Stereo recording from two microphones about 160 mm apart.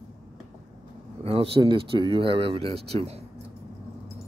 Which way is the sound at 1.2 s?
35° right (ahead or behind).